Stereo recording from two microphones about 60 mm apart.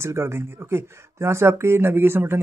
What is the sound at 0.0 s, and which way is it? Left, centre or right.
Speech, right.